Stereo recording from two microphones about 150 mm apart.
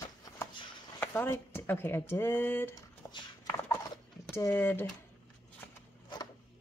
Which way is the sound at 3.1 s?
30° left (ahead or behind).